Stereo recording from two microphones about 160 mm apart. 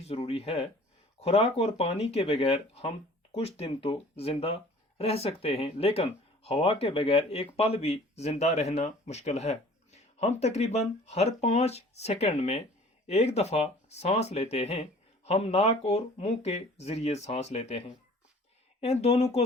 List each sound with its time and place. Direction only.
0.0 s speech: 40° left (ahead or behind)